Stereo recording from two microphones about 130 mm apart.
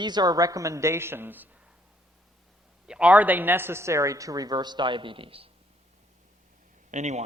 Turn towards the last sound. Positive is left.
turn(degrees=-65)  # may be behind; listen again after turning